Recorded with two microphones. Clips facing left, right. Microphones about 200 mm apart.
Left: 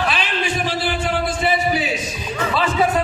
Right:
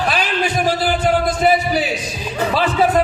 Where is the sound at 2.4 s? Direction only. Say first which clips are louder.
Right 3 dB; 35° right (ahead or behind).